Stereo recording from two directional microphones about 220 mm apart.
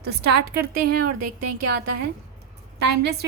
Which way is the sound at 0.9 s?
90° right.